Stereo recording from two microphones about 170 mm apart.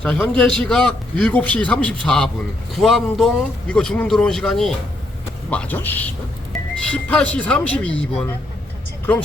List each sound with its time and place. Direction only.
0.0 s a man's voice: 10° left (ahead or behind)